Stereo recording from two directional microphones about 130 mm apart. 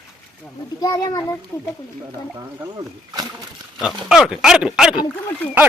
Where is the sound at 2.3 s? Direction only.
30° right (ahead or behind).